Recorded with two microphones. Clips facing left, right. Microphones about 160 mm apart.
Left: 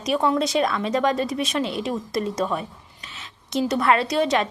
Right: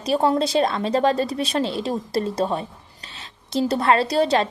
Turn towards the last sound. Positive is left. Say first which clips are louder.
# right 2 dB
turn(degrees=-30)  # may be behind; listen again after turning